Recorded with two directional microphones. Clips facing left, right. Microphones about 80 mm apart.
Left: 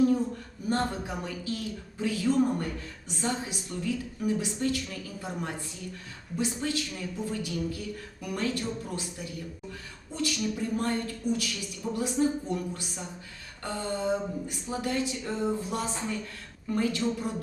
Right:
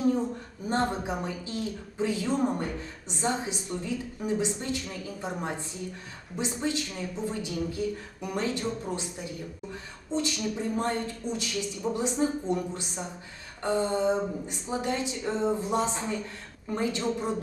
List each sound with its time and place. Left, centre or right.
0.7 s a woman's voice: right